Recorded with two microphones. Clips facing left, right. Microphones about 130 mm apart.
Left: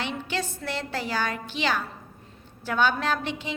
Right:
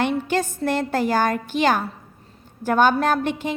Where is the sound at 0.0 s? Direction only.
45° right (ahead or behind).